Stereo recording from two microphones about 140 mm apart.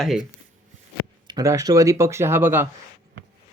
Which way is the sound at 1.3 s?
25° right (ahead or behind).